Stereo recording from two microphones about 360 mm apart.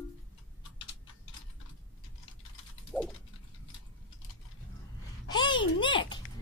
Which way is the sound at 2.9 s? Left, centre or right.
Centre.